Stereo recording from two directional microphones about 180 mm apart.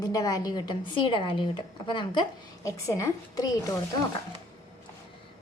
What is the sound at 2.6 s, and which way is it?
A woman's voice, 15° left (ahead or behind).